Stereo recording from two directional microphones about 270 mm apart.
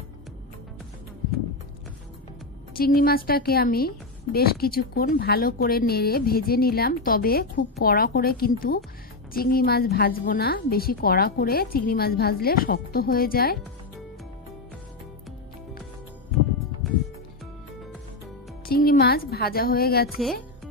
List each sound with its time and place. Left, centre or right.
2.8 s speech: left
18.7 s a woman's voice: left